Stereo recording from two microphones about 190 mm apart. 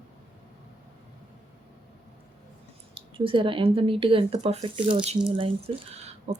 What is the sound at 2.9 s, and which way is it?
Speech, 30° right (ahead or behind).